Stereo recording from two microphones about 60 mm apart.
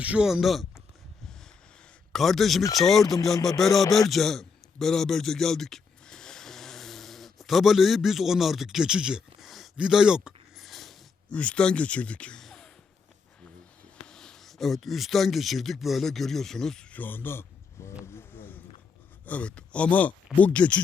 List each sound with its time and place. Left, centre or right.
0.0 s speech: right
0.3 s speech: centre
2.1 s speech: centre
4.1 s a sound: centre
9.7 s speech: centre
10.6 s a sound: centre
11.3 s speech: centre
12.4 s a sound: centre
14.1 s speech: centre
16.9 s speech: left
18.0 s a sound: left
19.2 s speech: left